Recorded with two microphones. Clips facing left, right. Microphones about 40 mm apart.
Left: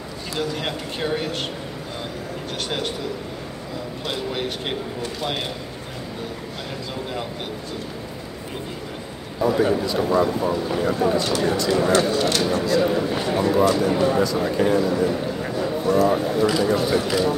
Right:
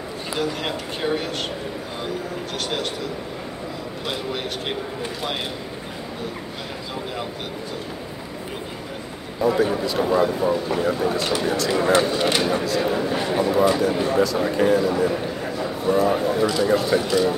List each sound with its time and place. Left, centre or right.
0.4 s speech: centre
4.0 s speech: centre
9.4 s speech: centre
11.7 s speech: centre
12.6 s speech: centre
15.4 s a sound: centre
15.9 s speech: centre